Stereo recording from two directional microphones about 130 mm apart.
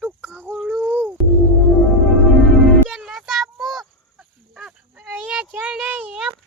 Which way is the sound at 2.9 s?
5° right (ahead or behind).